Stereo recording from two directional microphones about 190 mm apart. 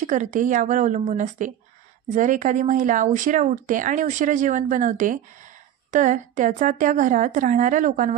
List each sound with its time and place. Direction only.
0.0 s speech: 40° right (ahead or behind)